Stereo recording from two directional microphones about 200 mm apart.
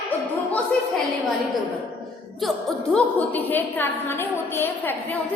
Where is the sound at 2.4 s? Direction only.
Centre (ahead or behind).